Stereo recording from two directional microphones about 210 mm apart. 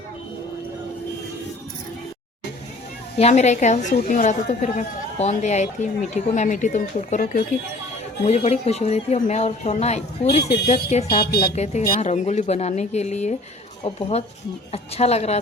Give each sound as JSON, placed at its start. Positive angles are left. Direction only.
{"t": 3.2, "sound": "a woman's voice", "side_deg": 30}